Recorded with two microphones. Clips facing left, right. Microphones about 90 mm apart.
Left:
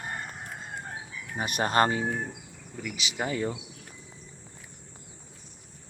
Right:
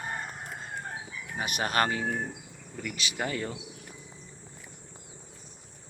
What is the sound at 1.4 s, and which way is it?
Speech, 35° left (ahead or behind).